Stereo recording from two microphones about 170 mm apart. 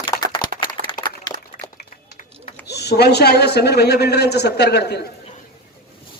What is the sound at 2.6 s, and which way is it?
A man's voice, 75° left (ahead or behind).